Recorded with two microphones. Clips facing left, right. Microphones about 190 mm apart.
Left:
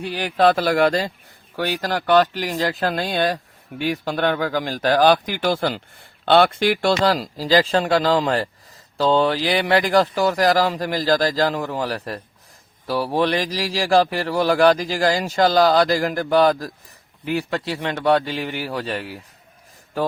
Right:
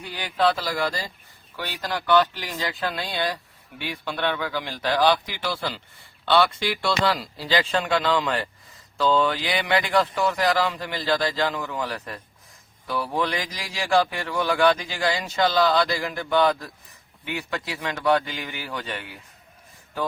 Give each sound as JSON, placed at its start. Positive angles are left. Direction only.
{"t": 0.0, "sound": "speech", "side_deg": 65}
{"t": 1.5, "sound": "speech", "side_deg": 45}